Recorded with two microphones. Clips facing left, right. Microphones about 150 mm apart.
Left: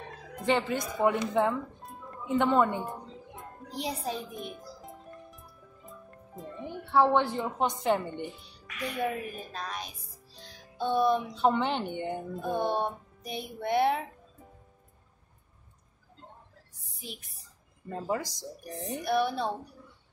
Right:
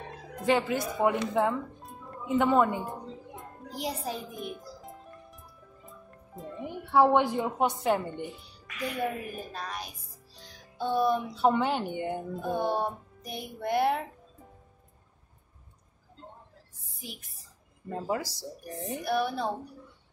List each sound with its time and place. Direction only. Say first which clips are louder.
0.4 s speech: right 2 dB; 5° right (ahead or behind)
3.3 s music: left 3 dB; centre (ahead or behind)
6.6 s a woman's voice: right 2 dB; 15° right (ahead or behind)
17.8 s speech: right 1 dB; 5° right (ahead or behind)